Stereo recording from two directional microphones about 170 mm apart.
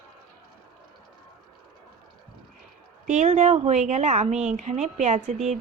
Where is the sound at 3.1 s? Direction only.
45° right (ahead or behind).